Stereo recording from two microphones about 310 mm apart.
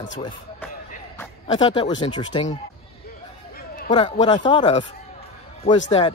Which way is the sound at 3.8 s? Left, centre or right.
Centre.